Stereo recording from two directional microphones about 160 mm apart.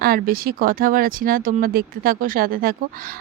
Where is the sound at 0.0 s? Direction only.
65° right (ahead or behind).